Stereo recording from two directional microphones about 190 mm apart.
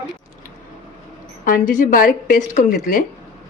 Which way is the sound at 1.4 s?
45° left (ahead or behind).